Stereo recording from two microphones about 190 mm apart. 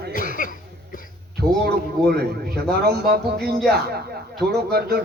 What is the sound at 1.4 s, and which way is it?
A man's voice, 55° right (ahead or behind).